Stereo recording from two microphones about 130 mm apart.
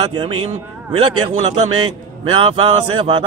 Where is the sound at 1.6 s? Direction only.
45° right (ahead or behind).